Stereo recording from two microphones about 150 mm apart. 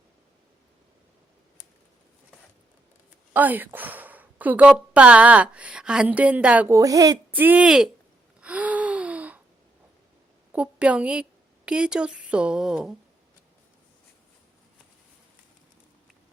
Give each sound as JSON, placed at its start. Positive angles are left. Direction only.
{"t": 3.3, "sound": "a woman's voice", "side_deg": -10}
{"t": 6.7, "sound": "speech", "side_deg": -25}
{"t": 7.3, "sound": "speech", "side_deg": -10}
{"t": 8.4, "sound": "gasp", "side_deg": -10}
{"t": 10.5, "sound": "a woman's voice", "side_deg": -10}